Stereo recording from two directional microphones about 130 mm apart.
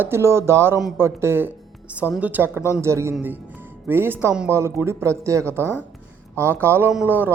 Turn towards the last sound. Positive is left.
turn(degrees=-15)  # may be behind; listen again after turning